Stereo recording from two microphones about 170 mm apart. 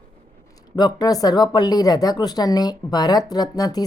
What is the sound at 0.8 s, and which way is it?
Speech, 25° left (ahead or behind).